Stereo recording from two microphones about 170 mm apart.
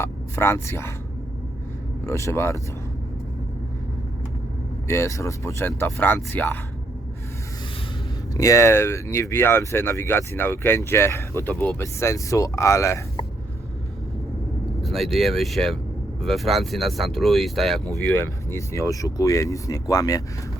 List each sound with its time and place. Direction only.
0.0 s speech: 15° left (ahead or behind)
2.0 s speech: 15° left (ahead or behind)
4.9 s speech: 15° left (ahead or behind)
8.3 s speech: 20° left (ahead or behind)
14.8 s speech: centre (ahead or behind)
17.9 s speech: 10° left (ahead or behind)